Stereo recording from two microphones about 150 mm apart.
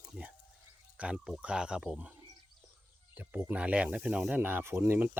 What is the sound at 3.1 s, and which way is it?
Speech, 10° right (ahead or behind).